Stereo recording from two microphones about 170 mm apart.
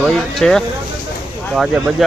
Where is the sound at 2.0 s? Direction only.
Centre (ahead or behind).